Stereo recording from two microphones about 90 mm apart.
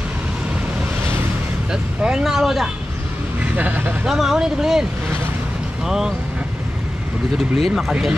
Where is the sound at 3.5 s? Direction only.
20° right (ahead or behind).